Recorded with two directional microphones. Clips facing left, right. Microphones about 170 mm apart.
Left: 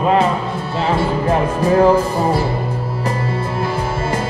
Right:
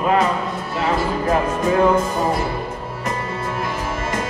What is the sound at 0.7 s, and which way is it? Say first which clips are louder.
Music: left 3 dB; 30° left (ahead or behind).